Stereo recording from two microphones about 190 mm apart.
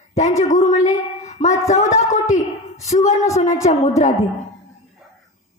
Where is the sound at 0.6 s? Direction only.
40° left (ahead or behind).